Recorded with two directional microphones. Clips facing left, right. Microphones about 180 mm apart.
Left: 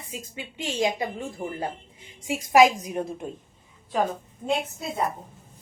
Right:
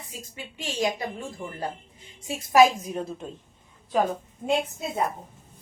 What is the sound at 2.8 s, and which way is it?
Speech, 15° left (ahead or behind).